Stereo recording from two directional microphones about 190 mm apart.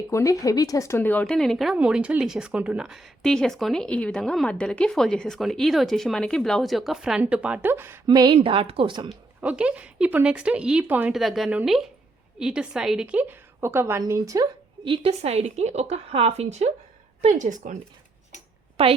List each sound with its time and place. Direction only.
0.1 s speech: 15° left (ahead or behind); by 8.0 s 10° right (ahead or behind)
8.0 s speech: 20° right (ahead or behind)
9.0 s a woman's voice: 5° right (ahead or behind)
14.8 s a woman's voice: 30° right (ahead or behind)
18.8 s a woman's voice: 30° right (ahead or behind)